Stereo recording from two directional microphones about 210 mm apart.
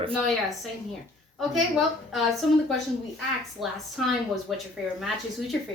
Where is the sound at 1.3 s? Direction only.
Centre (ahead or behind).